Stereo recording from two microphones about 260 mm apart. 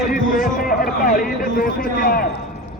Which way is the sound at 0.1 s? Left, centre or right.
Left.